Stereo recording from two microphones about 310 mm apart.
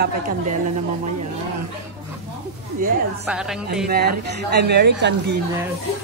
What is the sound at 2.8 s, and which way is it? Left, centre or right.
Speech, right.